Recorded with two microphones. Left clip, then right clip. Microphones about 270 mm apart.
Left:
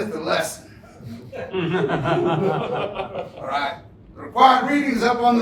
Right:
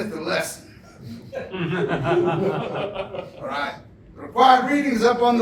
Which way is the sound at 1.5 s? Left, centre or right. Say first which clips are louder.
Left 3 dB; left.